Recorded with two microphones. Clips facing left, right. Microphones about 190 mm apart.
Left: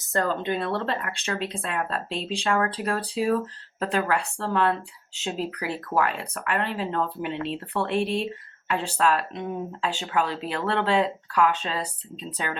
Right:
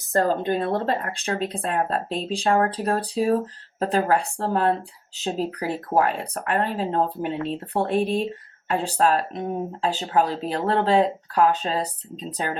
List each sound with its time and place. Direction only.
0.1 s speech: 35° right (ahead or behind)